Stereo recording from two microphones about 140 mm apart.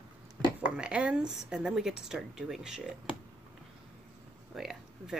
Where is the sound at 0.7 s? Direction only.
5° right (ahead or behind).